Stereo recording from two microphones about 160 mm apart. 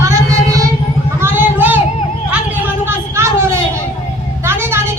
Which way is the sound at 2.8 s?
15° right (ahead or behind).